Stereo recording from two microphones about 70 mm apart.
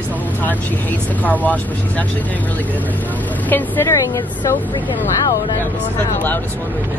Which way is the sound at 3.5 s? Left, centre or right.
Left.